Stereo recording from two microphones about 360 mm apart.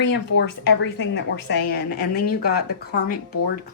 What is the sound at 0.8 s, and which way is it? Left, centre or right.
Speech, left.